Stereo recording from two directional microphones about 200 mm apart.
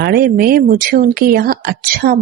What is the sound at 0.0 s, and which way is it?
Speech, 50° right (ahead or behind).